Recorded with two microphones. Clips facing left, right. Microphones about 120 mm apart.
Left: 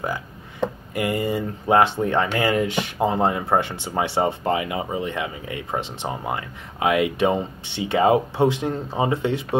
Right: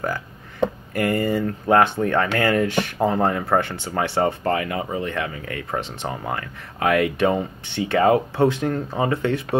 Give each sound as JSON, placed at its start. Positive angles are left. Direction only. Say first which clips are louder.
{"t": 0.9, "sound": "speech", "louder": "right 2 dB", "side_deg": 15}